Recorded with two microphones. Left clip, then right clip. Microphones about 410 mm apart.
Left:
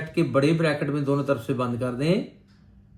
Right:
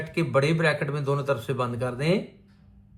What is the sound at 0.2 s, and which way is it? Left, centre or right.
Speech, right.